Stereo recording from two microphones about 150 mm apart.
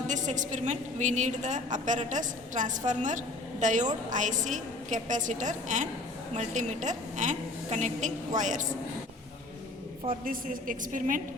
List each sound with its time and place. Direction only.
0.1 s a woman's voice: 55° right (ahead or behind)
10.2 s a woman's voice: 65° right (ahead or behind)